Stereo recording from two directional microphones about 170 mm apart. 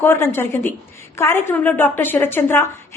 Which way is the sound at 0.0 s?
15° left (ahead or behind).